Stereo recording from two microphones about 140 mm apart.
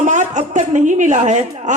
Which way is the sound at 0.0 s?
60° right (ahead or behind).